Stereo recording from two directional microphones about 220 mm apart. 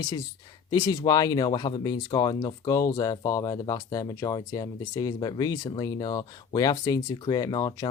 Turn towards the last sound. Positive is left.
turn(degrees=20)  # may be behind; listen again after turning